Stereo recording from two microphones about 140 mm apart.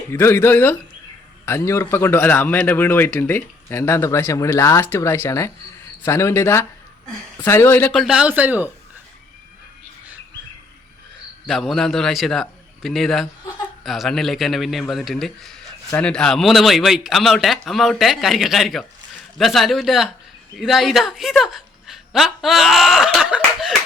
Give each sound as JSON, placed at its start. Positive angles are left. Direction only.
{"t": 0.1, "sound": "a man's voice", "side_deg": 20}
{"t": 7.9, "sound": "speech", "side_deg": -5}
{"t": 11.4, "sound": "a woman's voice", "side_deg": 0}